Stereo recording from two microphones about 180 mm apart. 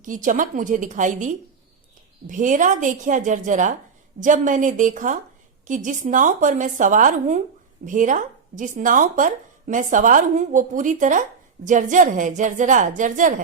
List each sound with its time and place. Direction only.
0.0 s speech: 45° right (ahead or behind)